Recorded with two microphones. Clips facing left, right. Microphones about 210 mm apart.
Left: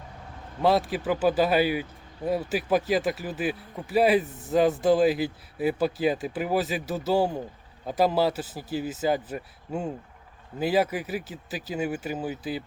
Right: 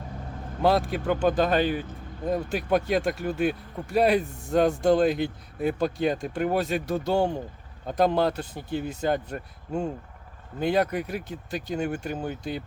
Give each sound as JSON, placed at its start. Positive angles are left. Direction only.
{"t": 0.6, "sound": "speech", "side_deg": 0}